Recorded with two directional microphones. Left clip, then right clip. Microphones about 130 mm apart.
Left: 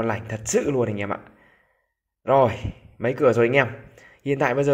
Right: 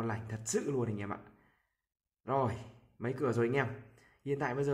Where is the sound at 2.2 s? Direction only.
35° left (ahead or behind).